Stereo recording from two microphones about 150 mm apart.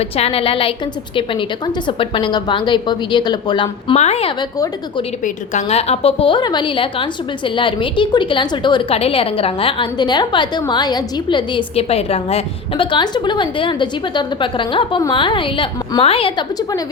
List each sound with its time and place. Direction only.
0.0 s a woman's voice: 40° left (ahead or behind)
3.9 s a woman's voice: 45° left (ahead or behind)
4.5 s a woman's voice: 25° left (ahead or behind)
5.2 s a woman's voice: 45° left (ahead or behind)